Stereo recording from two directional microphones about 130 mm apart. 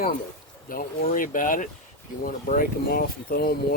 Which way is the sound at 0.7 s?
90° left.